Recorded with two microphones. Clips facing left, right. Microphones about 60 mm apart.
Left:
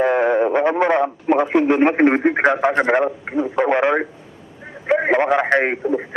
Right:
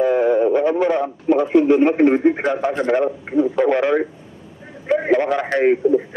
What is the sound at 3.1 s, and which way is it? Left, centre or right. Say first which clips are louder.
Speech: right 3 dB; left.